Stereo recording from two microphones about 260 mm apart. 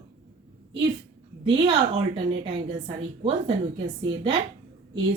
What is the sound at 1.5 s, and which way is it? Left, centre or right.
A woman's voice, right.